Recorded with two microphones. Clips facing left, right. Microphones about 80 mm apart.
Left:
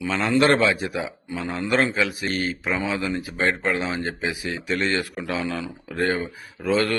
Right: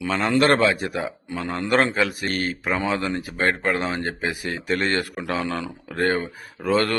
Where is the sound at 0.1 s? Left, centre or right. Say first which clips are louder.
Even; right.